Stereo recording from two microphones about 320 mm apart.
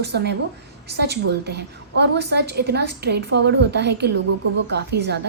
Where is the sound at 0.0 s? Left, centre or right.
Right.